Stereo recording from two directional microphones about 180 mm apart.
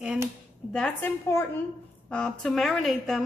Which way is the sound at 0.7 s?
10° left (ahead or behind).